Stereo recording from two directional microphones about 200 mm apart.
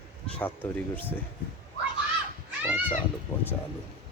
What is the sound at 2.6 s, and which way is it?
Cat, 10° right (ahead or behind).